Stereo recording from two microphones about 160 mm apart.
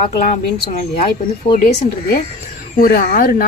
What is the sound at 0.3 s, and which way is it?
A woman's voice, 50° left (ahead or behind).